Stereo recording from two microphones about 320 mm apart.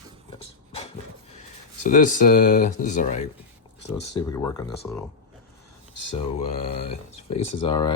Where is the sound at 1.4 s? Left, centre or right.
Left.